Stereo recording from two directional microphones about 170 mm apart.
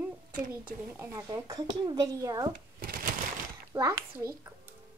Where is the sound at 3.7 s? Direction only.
20° right (ahead or behind).